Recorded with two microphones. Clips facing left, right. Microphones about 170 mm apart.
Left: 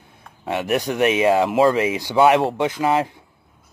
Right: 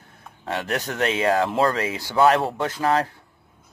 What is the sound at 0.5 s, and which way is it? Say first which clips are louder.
Speech: left 5 dB; 15° left (ahead or behind).